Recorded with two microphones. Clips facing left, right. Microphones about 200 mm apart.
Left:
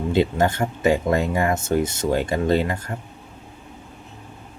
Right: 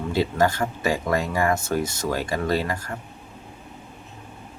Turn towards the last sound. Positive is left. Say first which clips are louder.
# left 4 dB
turn(degrees=25)  # may be behind; listen again after turning